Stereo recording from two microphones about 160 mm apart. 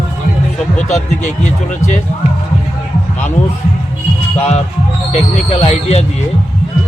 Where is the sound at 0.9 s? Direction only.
45° left (ahead or behind).